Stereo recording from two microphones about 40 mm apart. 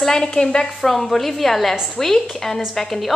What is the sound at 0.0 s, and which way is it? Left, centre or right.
Speech, centre.